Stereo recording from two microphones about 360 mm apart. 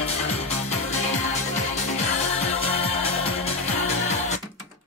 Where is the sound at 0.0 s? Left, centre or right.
Centre.